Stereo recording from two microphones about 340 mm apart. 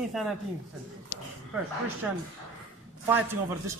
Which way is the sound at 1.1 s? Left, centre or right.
Left.